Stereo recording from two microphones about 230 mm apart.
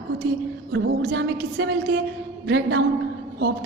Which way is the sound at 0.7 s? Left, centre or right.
Right.